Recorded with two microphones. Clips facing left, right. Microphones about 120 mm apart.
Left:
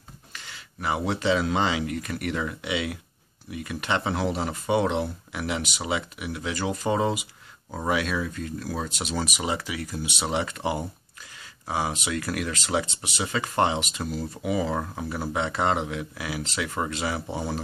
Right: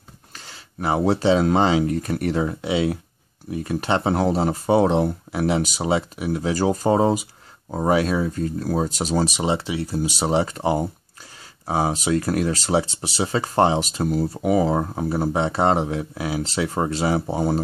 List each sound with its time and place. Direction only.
0.3 s speech: 35° right (ahead or behind)